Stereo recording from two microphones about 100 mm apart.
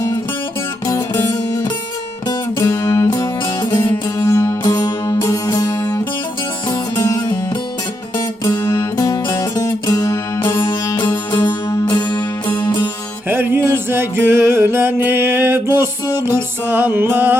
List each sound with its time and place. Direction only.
0.9 s music: 35° left (ahead or behind)
4.3 s music: 35° left (ahead or behind)
8.4 s music: 30° left (ahead or behind)
10.8 s music: 45° left (ahead or behind)
13.2 s music: 20° right (ahead or behind)